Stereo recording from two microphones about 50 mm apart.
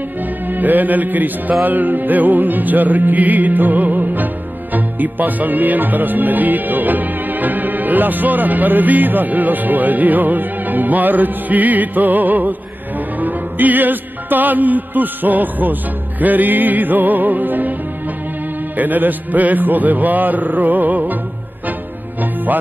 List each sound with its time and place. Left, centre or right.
0.5 s music: right
18.8 s music: right